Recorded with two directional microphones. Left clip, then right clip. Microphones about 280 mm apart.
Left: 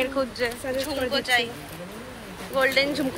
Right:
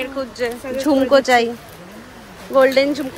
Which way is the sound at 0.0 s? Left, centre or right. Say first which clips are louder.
Right 2 dB; centre.